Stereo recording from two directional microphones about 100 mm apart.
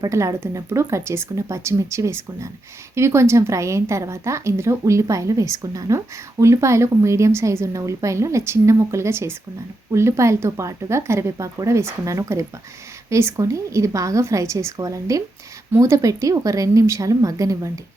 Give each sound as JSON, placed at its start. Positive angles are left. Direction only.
{"t": 0.0, "sound": "a woman's voice", "side_deg": -30}